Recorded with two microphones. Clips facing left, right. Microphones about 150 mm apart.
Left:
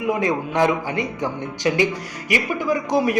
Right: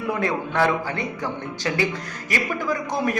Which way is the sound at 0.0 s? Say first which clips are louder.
Left 3 dB; 15° left (ahead or behind).